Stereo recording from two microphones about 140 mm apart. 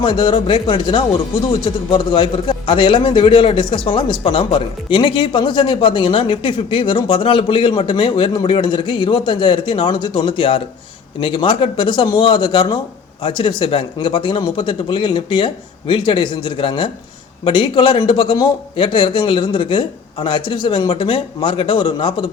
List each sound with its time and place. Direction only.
0.0 s a man's voice: 35° left (ahead or behind)